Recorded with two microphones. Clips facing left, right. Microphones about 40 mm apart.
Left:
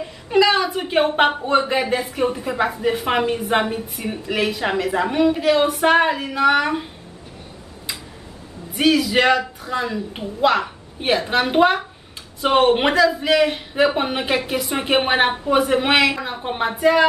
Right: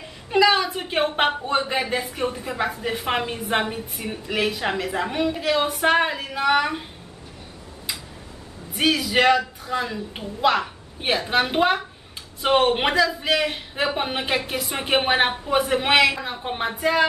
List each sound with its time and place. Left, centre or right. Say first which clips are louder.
0.0 s a woman's voice: left 2 dB; centre
8.7 s speech: left 3 dB; centre